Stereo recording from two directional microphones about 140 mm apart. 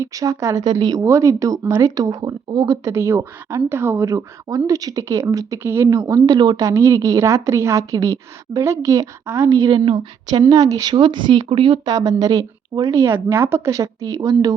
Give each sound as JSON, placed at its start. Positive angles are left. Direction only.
{"t": 0.0, "sound": "speech", "side_deg": -25}
{"t": 9.6, "sound": "speech", "side_deg": -35}